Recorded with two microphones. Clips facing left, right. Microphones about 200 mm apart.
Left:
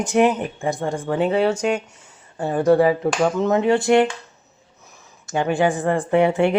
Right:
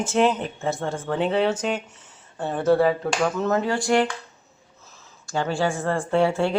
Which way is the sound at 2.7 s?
15° left (ahead or behind).